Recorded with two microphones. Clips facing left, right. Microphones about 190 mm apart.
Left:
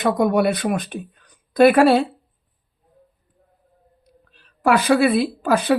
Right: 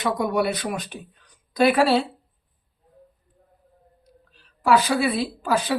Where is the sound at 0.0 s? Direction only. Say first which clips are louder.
Left 5 dB; 55° left (ahead or behind).